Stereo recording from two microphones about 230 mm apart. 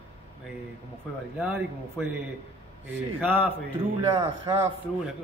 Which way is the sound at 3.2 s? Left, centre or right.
Centre.